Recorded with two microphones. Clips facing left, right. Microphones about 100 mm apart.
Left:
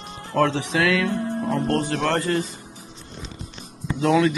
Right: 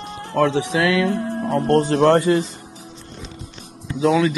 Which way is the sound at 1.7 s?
35° right (ahead or behind).